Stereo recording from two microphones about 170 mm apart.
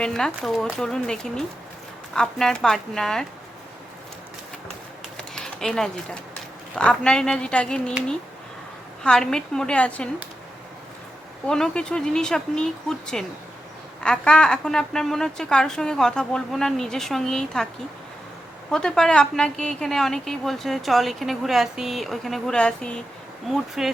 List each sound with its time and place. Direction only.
0.0 s a woman's voice: 5° left (ahead or behind)
5.1 s a sound: 5° left (ahead or behind)
6.7 s a woman's voice: 5° left (ahead or behind)
9.0 s a woman's voice: 5° left (ahead or behind)
11.4 s a woman's voice: 5° left (ahead or behind)
18.7 s a woman's voice: 5° left (ahead or behind)